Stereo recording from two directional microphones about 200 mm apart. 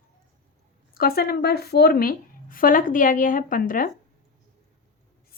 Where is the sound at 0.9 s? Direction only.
50° left (ahead or behind).